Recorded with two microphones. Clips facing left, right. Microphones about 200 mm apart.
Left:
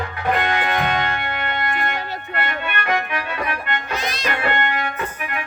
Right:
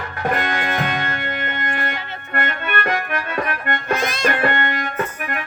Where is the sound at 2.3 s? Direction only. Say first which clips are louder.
Right 3 dB; 45° right (ahead or behind).